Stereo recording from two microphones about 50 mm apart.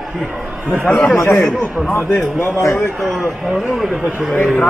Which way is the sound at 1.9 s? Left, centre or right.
Left.